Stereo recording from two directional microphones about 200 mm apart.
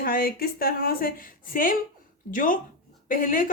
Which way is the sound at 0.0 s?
45° left (ahead or behind).